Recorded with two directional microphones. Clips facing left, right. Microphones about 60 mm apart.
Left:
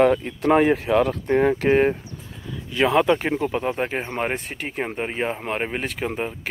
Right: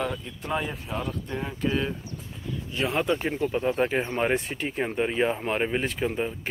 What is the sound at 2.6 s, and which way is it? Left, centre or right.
Speech, left.